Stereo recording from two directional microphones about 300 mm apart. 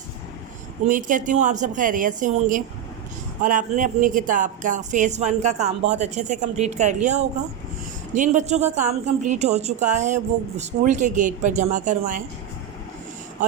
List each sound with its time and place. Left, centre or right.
0.9 s a woman's voice: right